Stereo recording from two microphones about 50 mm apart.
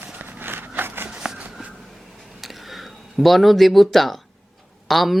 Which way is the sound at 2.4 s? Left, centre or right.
Centre.